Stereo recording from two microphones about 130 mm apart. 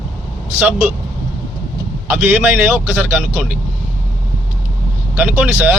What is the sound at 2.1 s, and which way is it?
Speech, 15° right (ahead or behind).